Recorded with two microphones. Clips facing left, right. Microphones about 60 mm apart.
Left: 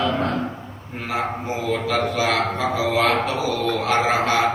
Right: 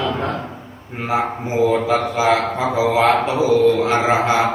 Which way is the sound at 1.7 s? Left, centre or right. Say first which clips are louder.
Right 4 dB; right.